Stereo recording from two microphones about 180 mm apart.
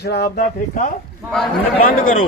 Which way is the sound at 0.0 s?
65° left (ahead or behind).